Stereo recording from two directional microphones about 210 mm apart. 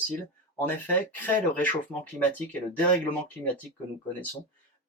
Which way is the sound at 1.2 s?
5° left (ahead or behind).